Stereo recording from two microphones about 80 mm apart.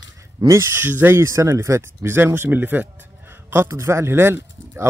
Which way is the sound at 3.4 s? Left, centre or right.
Right.